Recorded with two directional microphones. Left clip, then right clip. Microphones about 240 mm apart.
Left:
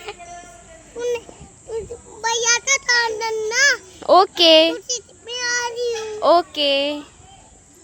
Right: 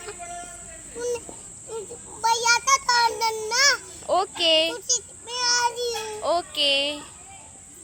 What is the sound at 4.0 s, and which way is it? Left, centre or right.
Speech, left.